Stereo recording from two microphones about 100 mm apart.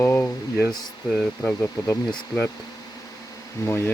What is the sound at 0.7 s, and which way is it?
Speech, 10° left (ahead or behind).